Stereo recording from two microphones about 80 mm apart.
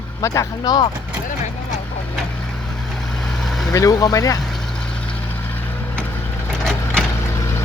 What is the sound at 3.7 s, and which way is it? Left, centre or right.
Speech, left.